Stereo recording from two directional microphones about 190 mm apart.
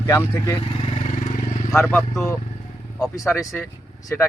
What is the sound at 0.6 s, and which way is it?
Vehicle, 30° left (ahead or behind).